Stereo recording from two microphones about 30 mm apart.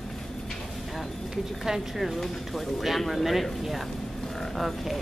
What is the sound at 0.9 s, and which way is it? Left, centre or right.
Speech, centre.